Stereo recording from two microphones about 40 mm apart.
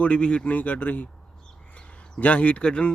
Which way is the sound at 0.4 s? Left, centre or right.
Left.